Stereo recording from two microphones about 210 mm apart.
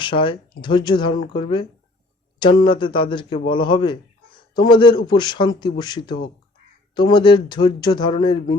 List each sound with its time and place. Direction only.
0.0 s speech: 25° left (ahead or behind)